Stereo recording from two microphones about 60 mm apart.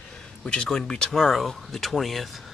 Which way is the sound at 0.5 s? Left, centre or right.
Centre.